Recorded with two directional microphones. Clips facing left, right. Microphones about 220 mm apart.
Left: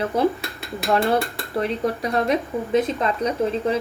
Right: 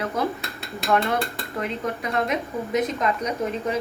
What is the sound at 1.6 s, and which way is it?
A woman's voice, 35° left (ahead or behind).